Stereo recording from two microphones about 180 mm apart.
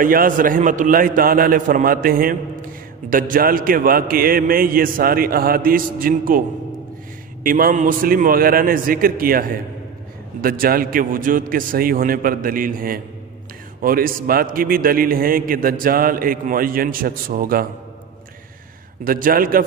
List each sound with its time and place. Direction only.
0.0 s a man's voice: 50° right (ahead or behind)
7.4 s a man's voice: 50° right (ahead or behind)
19.0 s a man's voice: 50° right (ahead or behind)